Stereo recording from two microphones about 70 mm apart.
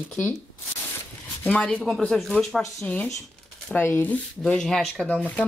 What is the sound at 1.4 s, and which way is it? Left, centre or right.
Speech, centre.